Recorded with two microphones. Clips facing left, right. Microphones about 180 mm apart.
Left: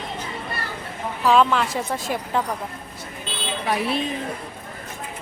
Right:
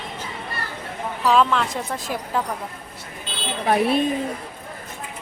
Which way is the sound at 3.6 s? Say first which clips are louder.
Right 5 dB; 50° right (ahead or behind).